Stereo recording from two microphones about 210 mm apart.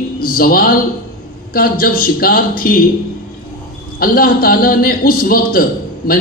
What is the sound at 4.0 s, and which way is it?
A man's voice, 45° left (ahead or behind).